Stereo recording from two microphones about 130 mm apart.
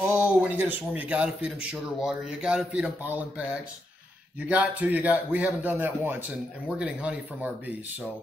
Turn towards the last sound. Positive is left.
turn(degrees=-10)  # may be behind; listen again after turning